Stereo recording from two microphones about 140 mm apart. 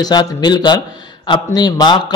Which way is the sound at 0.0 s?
30° left (ahead or behind).